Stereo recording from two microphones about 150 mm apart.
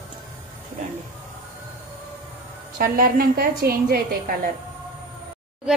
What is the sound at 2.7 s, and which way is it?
A woman's voice, 75° right (ahead or behind).